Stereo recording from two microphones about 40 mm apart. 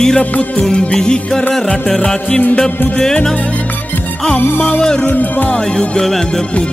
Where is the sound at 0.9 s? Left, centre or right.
Centre.